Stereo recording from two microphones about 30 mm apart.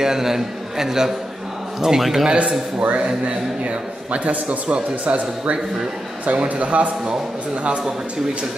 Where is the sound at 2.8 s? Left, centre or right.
Right.